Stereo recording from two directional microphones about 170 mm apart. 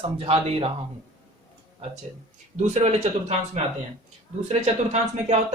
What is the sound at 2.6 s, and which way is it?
Speech, 40° right (ahead or behind).